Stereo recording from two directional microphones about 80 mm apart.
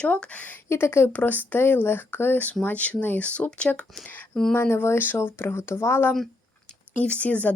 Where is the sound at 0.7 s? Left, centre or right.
Left.